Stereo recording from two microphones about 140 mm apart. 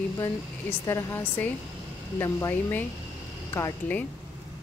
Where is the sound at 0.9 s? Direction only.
20° left (ahead or behind).